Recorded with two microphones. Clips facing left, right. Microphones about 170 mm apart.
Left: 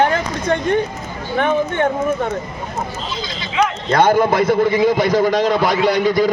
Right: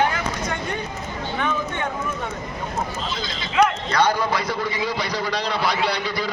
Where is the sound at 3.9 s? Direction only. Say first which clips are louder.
Left 7 dB; 50° left (ahead or behind).